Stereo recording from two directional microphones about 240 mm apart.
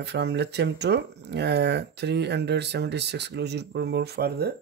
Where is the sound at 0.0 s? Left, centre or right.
Right.